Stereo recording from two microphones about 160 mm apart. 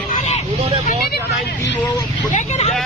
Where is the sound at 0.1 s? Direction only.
45° left (ahead or behind).